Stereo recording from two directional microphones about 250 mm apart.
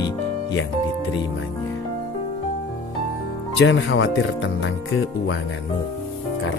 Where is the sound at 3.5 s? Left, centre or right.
Left.